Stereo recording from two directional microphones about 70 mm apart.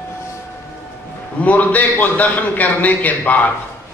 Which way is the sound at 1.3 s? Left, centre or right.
Left.